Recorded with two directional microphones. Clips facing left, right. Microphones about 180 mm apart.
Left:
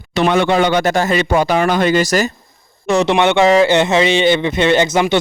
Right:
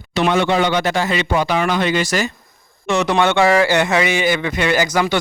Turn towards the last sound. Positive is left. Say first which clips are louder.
# left 4 dB
turn(degrees=20)  # may be behind; listen again after turning